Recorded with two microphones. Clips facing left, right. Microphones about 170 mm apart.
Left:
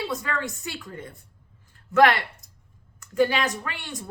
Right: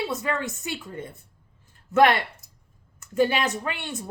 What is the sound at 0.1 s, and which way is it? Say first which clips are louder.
A woman's voice: right 2 dB; 20° right (ahead or behind).